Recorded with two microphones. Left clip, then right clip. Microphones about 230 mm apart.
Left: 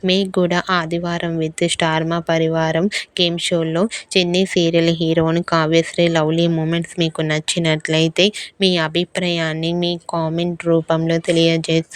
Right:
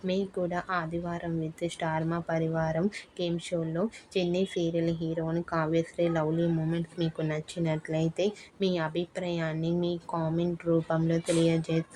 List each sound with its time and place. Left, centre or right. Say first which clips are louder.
0.0 s speech: left 13 dB; left